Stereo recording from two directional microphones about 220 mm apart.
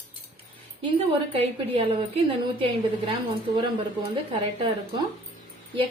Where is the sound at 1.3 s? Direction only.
25° right (ahead or behind).